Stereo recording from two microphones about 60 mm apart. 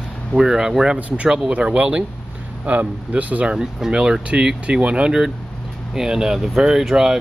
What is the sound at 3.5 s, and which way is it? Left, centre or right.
Speech, centre.